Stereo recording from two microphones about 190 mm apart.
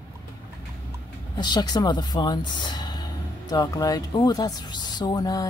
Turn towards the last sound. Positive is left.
turn(degrees=20)  # may be behind; listen again after turning